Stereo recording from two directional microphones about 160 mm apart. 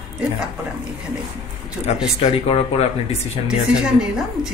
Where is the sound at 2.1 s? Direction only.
35° left (ahead or behind).